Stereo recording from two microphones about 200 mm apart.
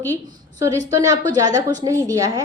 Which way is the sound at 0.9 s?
20° right (ahead or behind).